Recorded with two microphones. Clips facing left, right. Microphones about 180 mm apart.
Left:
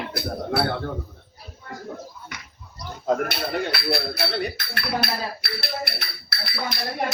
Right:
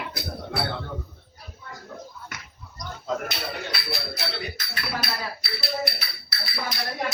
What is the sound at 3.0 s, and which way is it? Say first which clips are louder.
Speech: left 6 dB; 55° left (ahead or behind).